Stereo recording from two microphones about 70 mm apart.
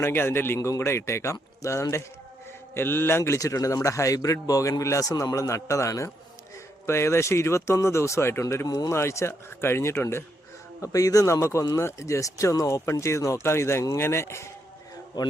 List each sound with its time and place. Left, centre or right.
0.0 s speech: left
2.7 s a man's voice: left
8.6 s speech: left
8.9 s speech: left
10.8 s speech: left
11.8 s a man's voice: left